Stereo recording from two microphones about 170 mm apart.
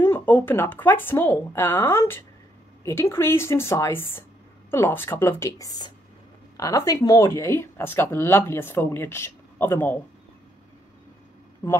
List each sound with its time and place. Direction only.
0.0 s speech: 10° left (ahead or behind)